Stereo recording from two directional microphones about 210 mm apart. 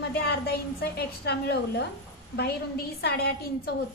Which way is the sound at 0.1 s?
50° left (ahead or behind).